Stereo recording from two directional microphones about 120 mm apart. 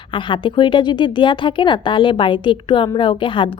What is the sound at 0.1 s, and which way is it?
A woman's voice, 45° left (ahead or behind).